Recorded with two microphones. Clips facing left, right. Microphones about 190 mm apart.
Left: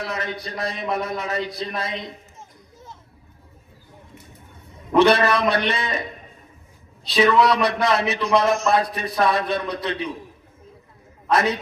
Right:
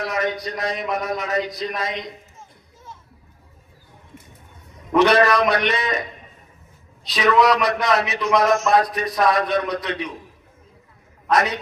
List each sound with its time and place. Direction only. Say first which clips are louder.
0.0 s a man's voice: right 5 dB; 30° left (ahead or behind)
4.9 s a man's voice: right 1 dB; 30° left (ahead or behind)
7.1 s a man's voice: even; 30° left (ahead or behind)
11.3 s a man's voice: even; 30° left (ahead or behind)